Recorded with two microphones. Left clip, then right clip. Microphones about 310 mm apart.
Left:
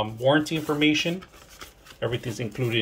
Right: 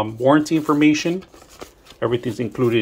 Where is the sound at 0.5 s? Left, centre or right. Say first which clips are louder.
Right 9 dB; centre.